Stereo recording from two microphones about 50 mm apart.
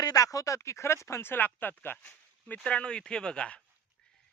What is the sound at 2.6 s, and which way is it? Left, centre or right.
Speech, left.